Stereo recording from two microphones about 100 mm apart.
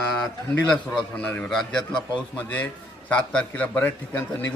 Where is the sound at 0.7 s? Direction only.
10° left (ahead or behind).